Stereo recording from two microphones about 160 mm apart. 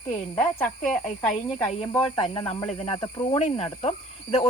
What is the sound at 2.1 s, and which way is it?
Speech, 35° left (ahead or behind).